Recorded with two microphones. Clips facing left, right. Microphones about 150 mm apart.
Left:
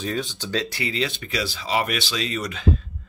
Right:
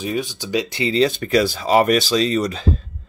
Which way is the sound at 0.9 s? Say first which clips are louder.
Right 12 dB; 45° right (ahead or behind).